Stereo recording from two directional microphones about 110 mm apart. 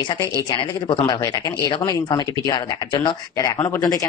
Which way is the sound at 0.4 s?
40° left (ahead or behind).